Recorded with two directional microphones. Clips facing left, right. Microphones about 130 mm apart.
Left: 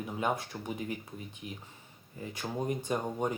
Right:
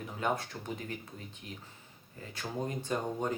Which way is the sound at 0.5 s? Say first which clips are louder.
Left 3 dB; 15° left (ahead or behind).